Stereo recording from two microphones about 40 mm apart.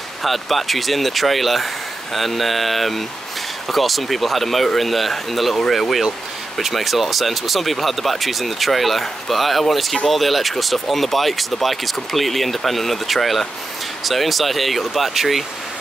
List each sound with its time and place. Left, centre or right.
0.2 s speech: centre